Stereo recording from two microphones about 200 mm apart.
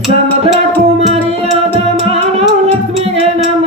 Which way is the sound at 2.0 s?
30° right (ahead or behind).